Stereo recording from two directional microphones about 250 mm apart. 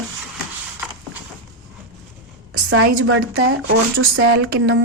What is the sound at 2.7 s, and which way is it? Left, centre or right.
Speech, right.